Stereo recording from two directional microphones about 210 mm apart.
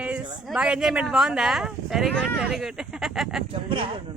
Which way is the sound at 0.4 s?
5° right (ahead or behind).